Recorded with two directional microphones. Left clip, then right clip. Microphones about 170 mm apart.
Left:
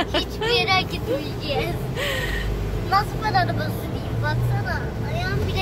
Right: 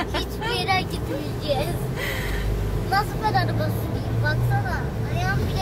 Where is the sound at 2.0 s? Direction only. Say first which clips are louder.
Left 5 dB; 30° left (ahead or behind).